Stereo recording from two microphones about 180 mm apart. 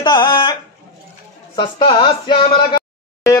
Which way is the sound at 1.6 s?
30° left (ahead or behind).